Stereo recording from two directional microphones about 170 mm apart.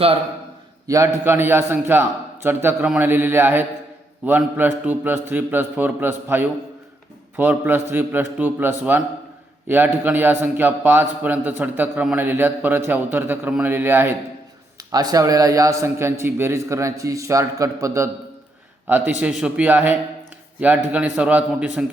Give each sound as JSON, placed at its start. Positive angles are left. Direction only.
{"t": 0.9, "sound": "a man's voice", "side_deg": -20}